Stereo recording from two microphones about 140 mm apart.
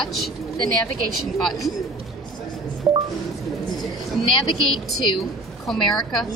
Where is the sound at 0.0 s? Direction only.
Centre (ahead or behind).